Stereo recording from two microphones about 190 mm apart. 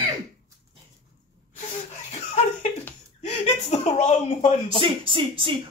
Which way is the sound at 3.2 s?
35° left (ahead or behind).